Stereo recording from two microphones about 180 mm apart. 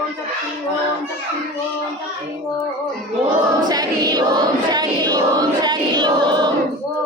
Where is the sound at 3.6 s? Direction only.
20° right (ahead or behind).